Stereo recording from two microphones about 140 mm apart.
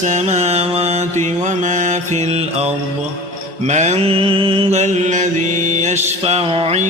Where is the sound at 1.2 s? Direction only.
60° right (ahead or behind); by 4.8 s 40° right (ahead or behind).